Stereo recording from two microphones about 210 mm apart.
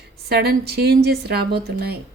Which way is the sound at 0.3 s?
50° right (ahead or behind).